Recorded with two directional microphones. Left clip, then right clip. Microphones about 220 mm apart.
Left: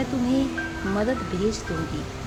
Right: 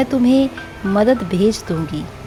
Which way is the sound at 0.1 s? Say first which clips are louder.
Right 9 dB; 35° right (ahead or behind).